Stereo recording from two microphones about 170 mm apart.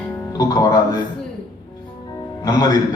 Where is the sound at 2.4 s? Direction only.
20° left (ahead or behind).